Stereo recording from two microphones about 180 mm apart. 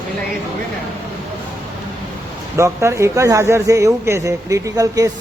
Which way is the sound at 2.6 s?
15° right (ahead or behind).